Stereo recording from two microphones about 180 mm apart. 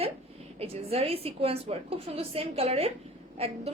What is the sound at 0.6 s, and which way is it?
A woman's voice, 35° right (ahead or behind).